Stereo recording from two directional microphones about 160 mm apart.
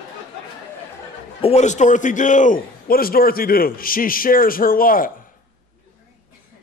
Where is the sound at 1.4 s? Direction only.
45° left (ahead or behind); by 5.1 s 60° left (ahead or behind).